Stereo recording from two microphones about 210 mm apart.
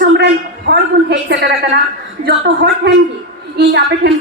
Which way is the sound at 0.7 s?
55° right (ahead or behind).